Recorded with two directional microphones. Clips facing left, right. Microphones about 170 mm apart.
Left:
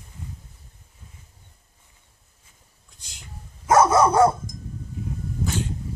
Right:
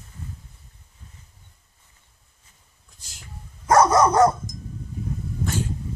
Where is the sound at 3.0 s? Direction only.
5° right (ahead or behind).